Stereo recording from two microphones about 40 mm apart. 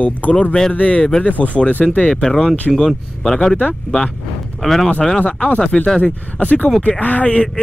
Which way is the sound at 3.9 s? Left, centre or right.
Left.